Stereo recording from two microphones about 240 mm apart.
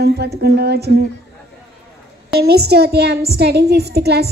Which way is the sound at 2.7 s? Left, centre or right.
Right.